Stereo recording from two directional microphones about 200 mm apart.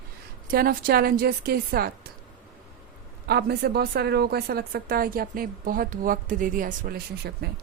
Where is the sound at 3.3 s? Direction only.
50° right (ahead or behind).